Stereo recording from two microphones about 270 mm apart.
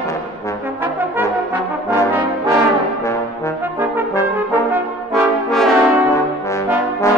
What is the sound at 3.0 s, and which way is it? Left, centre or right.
Brass instrument, centre.